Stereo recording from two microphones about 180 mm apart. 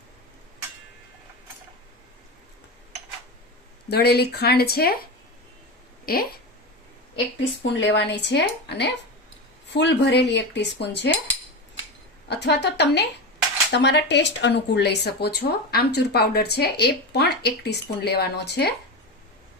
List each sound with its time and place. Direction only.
3.8 s speech: 65° left (ahead or behind)
6.1 s speech: 55° left (ahead or behind)
7.6 s speech: 85° left
12.4 s speech: 70° left (ahead or behind)